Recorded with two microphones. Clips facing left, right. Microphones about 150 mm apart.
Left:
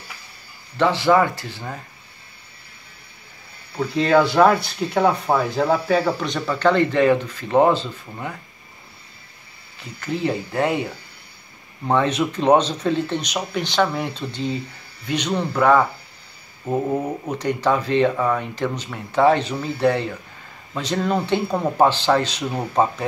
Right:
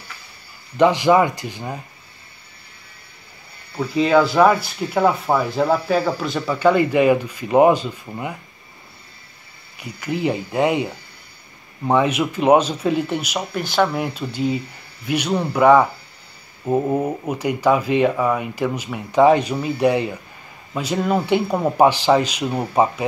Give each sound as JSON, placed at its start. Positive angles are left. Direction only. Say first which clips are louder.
{"t": 0.7, "sound": "speech", "louder": "right 2 dB", "side_deg": -15}
{"t": 3.7, "sound": "speech", "louder": "right 1 dB", "side_deg": 0}
{"t": 9.8, "sound": "speech", "louder": "right 1 dB", "side_deg": -15}